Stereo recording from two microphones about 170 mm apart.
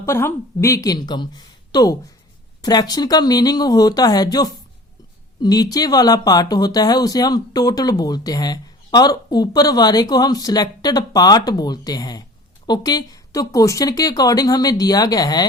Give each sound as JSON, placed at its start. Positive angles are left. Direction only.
{"t": 0.0, "sound": "speech", "side_deg": 15}